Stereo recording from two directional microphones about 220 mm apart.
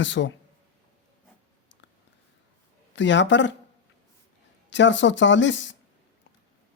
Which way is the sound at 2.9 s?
55° left (ahead or behind).